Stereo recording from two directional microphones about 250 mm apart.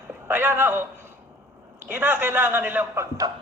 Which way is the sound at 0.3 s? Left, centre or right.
Centre.